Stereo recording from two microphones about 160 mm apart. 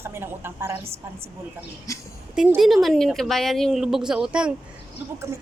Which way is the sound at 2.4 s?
5° right (ahead or behind).